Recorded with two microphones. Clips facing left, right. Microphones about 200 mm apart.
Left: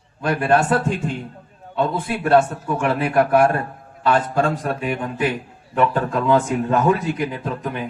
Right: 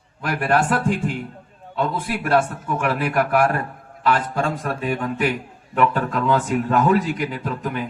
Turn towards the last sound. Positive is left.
turn(degrees=25)  # may be behind; listen again after turning